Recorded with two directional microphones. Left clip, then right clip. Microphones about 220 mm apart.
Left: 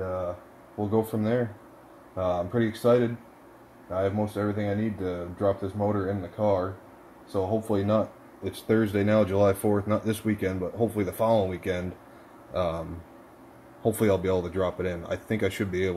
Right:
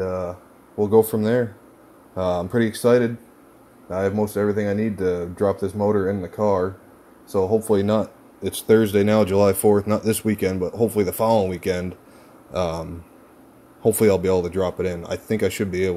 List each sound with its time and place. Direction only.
0.7 s speech: 50° right (ahead or behind)
13.8 s speech: 30° right (ahead or behind)